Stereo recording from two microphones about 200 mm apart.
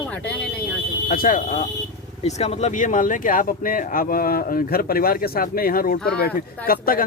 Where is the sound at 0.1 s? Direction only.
5° left (ahead or behind).